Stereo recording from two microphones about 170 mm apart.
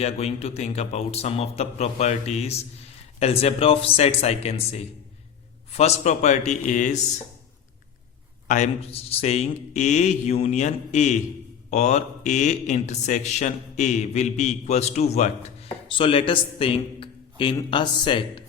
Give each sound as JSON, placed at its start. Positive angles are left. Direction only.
{"t": 0.0, "sound": "speech", "side_deg": 35}
{"t": 8.4, "sound": "speech", "side_deg": 45}